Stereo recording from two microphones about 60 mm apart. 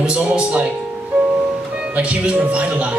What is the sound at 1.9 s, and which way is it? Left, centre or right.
Speech, right.